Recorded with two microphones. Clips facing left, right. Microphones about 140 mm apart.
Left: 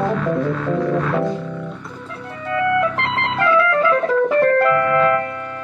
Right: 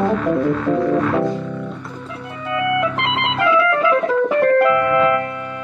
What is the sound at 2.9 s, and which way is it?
Music, 20° right (ahead or behind).